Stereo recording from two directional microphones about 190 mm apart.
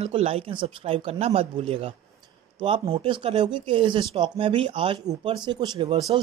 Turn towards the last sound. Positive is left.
turn(degrees=-25)  # may be behind; listen again after turning